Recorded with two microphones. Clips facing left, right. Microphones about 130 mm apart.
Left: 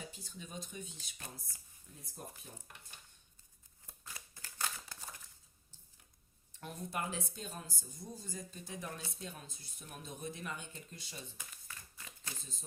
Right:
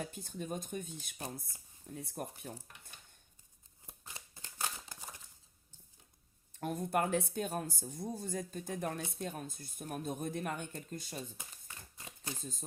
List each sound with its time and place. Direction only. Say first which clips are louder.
0.0 s speech: right 8 dB; 55° right (ahead or behind)
1.9 s speech: right 8 dB; 70° right (ahead or behind)
3.8 s a sound: right 1 dB; 20° right (ahead or behind)
6.6 s speech: right 8 dB; 50° right (ahead or behind)
11.5 s a sound: even; 25° right (ahead or behind)
12.4 s speech: right 9 dB; 45° right (ahead or behind)